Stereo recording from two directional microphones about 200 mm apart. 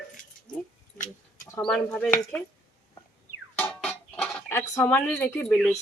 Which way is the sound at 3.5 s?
5° left (ahead or behind).